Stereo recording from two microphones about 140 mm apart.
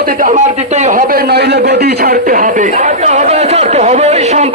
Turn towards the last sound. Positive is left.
turn(degrees=-50)  # may be behind; listen again after turning